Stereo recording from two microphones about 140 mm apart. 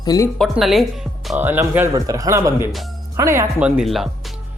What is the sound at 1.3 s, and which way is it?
Speech, 15° right (ahead or behind).